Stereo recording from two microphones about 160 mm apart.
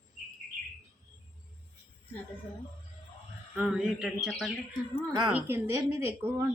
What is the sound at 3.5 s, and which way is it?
Speech, 5° right (ahead or behind).